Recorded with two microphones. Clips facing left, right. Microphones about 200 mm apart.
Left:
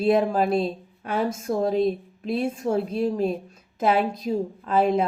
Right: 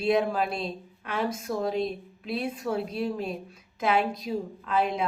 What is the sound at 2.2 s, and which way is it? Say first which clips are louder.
A woman's voice: left 6 dB; 45° left (ahead or behind).